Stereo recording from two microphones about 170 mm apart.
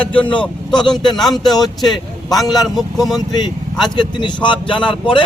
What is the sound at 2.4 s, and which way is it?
Speech, 20° left (ahead or behind).